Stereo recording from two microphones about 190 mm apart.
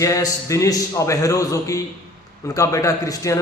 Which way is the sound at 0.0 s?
15° left (ahead or behind).